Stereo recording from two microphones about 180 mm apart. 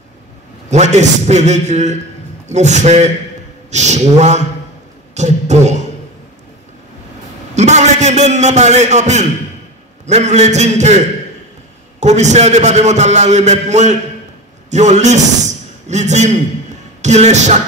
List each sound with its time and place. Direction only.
0.7 s a man's voice: 40° right (ahead or behind)
5.1 s a sound: 40° right (ahead or behind)
7.5 s a man's voice: 40° right (ahead or behind)